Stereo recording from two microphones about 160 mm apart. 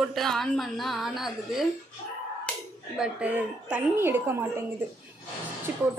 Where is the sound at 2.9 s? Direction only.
5° right (ahead or behind).